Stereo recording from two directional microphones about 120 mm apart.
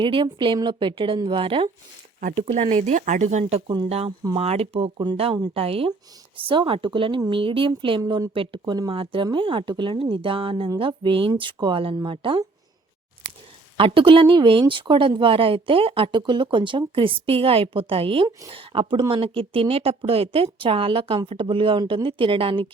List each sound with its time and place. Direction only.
0.0 s speech: 45° right (ahead or behind)
2.5 s speech: 65° right (ahead or behind)
3.8 s speech: 60° right (ahead or behind)
13.7 s speech: 45° right (ahead or behind)